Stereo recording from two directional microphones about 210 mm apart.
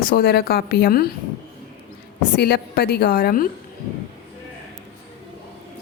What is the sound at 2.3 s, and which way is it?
A woman's voice, 50° left (ahead or behind).